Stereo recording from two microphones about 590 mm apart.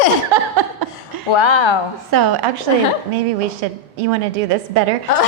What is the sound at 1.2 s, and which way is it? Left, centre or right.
Speech, left.